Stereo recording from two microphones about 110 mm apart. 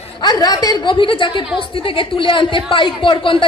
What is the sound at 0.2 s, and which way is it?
A woman's voice, 40° left (ahead or behind).